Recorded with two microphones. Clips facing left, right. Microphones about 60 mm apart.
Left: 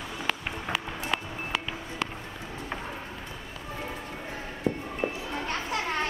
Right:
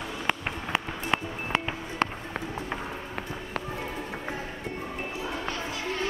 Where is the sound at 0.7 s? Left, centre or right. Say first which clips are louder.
Right 5 dB; right.